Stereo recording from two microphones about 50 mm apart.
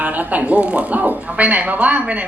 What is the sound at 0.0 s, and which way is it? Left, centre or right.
A woman's voice, right.